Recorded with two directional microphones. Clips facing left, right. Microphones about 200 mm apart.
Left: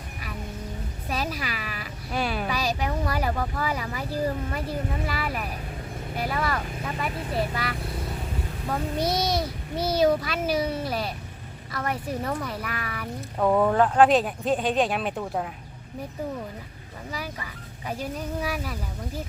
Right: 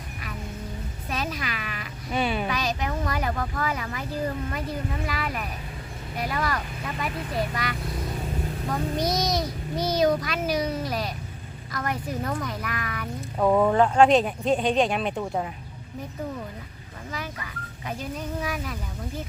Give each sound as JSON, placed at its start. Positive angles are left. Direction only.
{"t": 1.1, "sound": "a woman's voice", "side_deg": 5}
{"t": 5.0, "sound": "speech", "side_deg": 5}
{"t": 9.0, "sound": "child singing", "side_deg": 30}
{"t": 10.0, "sound": "speech", "side_deg": 5}
{"t": 17.8, "sound": "speech", "side_deg": 10}